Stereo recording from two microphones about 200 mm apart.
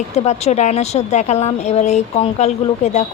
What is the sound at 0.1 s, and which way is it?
A woman's voice, 35° left (ahead or behind).